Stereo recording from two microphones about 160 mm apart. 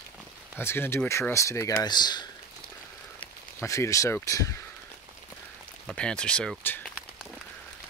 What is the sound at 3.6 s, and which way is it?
Speech, 20° left (ahead or behind).